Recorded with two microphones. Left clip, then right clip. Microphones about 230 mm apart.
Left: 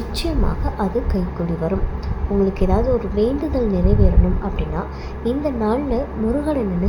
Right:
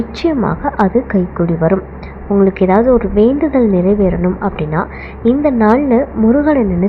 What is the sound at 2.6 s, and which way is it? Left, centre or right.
A woman's voice, right.